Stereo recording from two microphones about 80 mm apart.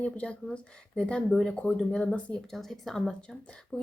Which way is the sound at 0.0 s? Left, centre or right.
Centre.